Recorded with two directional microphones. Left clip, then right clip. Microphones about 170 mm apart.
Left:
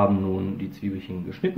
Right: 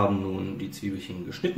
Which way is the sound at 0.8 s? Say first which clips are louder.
Left 2 dB; 30° left (ahead or behind).